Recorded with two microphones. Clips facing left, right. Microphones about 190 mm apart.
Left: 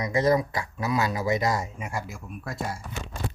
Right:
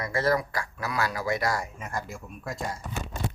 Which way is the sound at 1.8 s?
5° left (ahead or behind).